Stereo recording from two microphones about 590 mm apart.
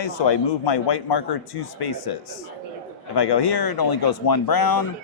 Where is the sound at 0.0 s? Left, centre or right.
Left.